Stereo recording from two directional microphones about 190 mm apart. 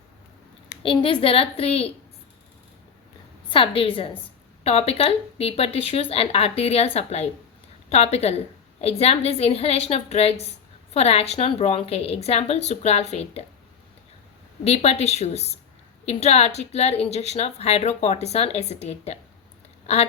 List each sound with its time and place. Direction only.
0.8 s a woman's voice: 30° left (ahead or behind)
3.5 s a woman's voice: 30° left (ahead or behind)
14.6 s a woman's voice: 35° left (ahead or behind)